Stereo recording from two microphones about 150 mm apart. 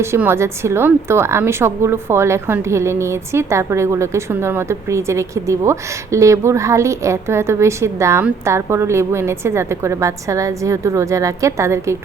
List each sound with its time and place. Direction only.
0.0 s a woman's voice: 15° right (ahead or behind)